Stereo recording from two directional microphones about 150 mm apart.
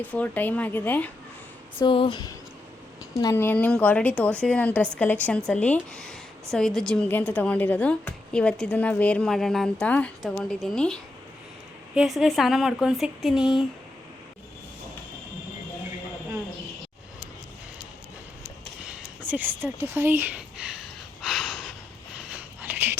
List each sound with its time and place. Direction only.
0.0 s speech: 10° left (ahead or behind)
1.8 s speech: 35° left (ahead or behind)
3.2 s speech: 20° left (ahead or behind); by 10.9 s 5° left (ahead or behind)
11.9 s speech: centre (ahead or behind)
18.8 s a sound: 10° right (ahead or behind)
22.2 s wheeze: 10° right (ahead or behind)